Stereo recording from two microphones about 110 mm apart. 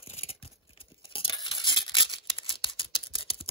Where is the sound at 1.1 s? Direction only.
50° left (ahead or behind).